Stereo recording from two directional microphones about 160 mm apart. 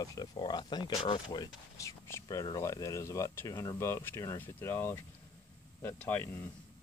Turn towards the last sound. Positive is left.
turn(degrees=15)  # may be behind; listen again after turning